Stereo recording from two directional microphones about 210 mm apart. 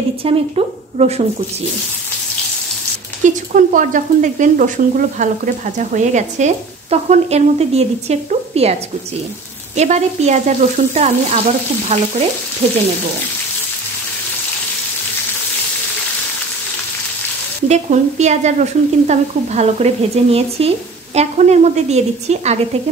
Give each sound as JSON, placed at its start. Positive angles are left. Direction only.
{"t": 0.2, "sound": "a woman's voice", "side_deg": -30}
{"t": 3.2, "sound": "speech", "side_deg": -35}
{"t": 9.8, "sound": "a woman's voice", "side_deg": -30}
{"t": 17.6, "sound": "speech", "side_deg": -35}